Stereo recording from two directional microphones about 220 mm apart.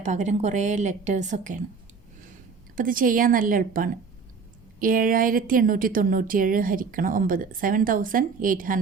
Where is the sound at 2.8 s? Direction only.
40° right (ahead or behind).